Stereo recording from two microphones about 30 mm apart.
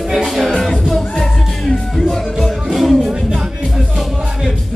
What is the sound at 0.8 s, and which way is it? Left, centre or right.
Music, centre.